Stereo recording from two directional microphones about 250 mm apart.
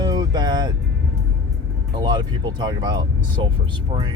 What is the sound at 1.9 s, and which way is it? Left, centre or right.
Speech, centre.